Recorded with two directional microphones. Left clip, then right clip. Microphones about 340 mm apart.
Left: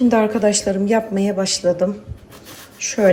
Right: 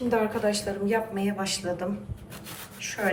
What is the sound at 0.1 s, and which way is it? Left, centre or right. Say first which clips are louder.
A woman's voice: left 9 dB; centre.